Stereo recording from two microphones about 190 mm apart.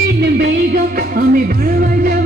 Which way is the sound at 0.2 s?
60° right (ahead or behind).